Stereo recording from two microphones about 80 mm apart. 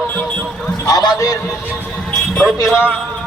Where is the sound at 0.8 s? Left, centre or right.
Left.